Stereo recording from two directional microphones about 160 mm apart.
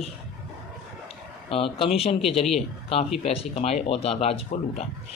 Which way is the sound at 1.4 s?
35° left (ahead or behind).